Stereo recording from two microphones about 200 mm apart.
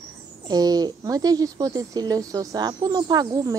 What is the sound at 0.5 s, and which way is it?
Speech, 20° right (ahead or behind).